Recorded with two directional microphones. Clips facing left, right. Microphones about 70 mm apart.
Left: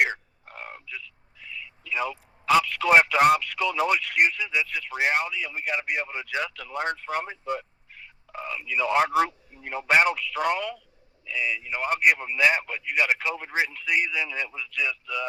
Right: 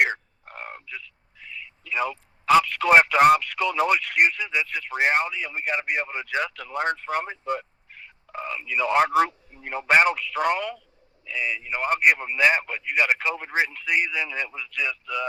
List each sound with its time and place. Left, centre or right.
0.0 s crow: right
11.3 s speech: right